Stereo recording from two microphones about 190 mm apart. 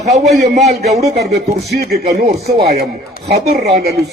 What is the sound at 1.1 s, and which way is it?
Speech, 60° right (ahead or behind).